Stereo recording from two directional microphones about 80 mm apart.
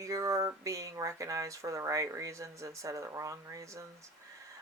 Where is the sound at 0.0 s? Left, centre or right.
Right.